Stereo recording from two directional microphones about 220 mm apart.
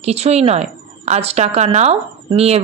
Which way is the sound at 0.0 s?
30° right (ahead or behind).